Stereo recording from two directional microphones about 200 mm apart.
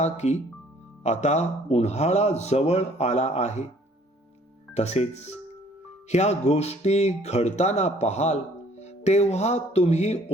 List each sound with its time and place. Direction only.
0.0 s a man's voice: 35° left (ahead or behind)
4.7 s a man's voice: 35° left (ahead or behind)